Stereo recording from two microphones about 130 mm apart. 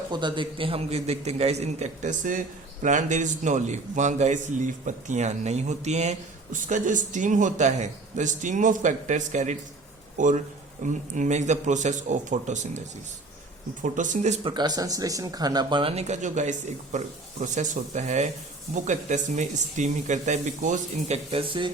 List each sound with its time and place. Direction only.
0.1 s a man's voice: 35° right (ahead or behind); by 2.4 s 85° right
2.8 s a man's voice: 70° right (ahead or behind)
13.8 s a man's voice: 75° right (ahead or behind)
14.4 s a man's voice: 35° right (ahead or behind); by 21.4 s 55° right (ahead or behind)